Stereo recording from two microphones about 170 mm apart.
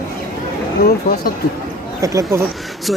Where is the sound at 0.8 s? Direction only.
65° left (ahead or behind).